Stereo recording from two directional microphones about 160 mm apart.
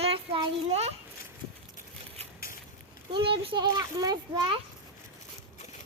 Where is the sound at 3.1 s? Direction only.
35° right (ahead or behind).